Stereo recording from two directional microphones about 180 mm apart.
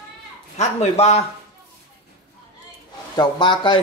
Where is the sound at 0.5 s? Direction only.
35° left (ahead or behind).